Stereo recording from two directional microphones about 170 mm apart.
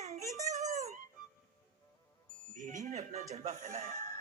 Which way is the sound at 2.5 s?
45° right (ahead or behind).